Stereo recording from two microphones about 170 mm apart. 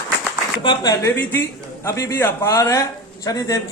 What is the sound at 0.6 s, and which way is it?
A man's voice, 25° left (ahead or behind).